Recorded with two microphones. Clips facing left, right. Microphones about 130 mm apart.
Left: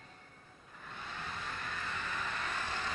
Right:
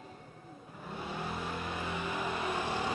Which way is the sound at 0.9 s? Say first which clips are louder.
Right 6 dB; 15° right (ahead or behind).